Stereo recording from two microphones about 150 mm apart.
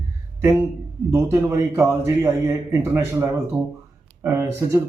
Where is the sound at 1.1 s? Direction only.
20° right (ahead or behind).